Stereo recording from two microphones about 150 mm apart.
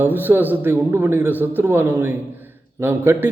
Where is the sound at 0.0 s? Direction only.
15° right (ahead or behind).